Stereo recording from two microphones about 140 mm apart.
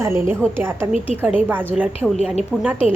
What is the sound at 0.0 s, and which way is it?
A woman's voice, 15° right (ahead or behind).